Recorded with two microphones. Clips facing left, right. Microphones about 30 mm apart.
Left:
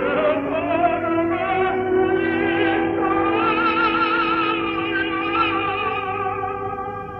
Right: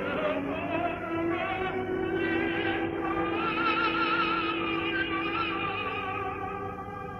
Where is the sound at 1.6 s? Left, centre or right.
Left.